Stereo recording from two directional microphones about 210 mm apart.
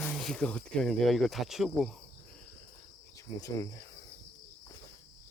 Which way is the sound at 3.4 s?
15° left (ahead or behind).